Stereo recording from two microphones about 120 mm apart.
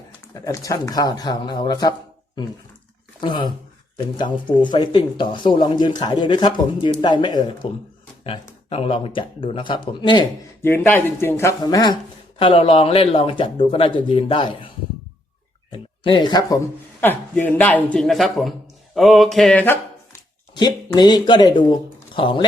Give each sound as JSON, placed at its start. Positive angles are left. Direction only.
{"t": 0.4, "sound": "speech", "side_deg": 30}
{"t": 3.2, "sound": "speech", "side_deg": 40}
{"t": 8.2, "sound": "speech", "side_deg": 50}
{"t": 10.6, "sound": "speech", "side_deg": 15}
{"t": 11.6, "sound": "speech", "side_deg": 35}
{"t": 12.4, "sound": "speech", "side_deg": 45}
{"t": 15.7, "sound": "speech", "side_deg": 45}
{"t": 17.0, "sound": "speech", "side_deg": 15}
{"t": 17.9, "sound": "speech", "side_deg": 0}
{"t": 19.5, "sound": "speech", "side_deg": 15}
{"t": 20.5, "sound": "speech", "side_deg": 35}